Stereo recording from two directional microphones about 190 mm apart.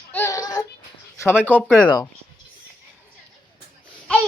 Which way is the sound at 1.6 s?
5° left (ahead or behind).